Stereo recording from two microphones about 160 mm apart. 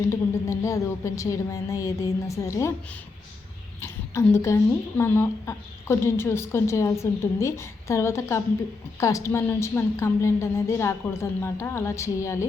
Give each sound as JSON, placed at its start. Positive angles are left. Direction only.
{"t": 0.1, "sound": "a woman's voice", "side_deg": 20}
{"t": 3.8, "sound": "a woman's voice", "side_deg": 15}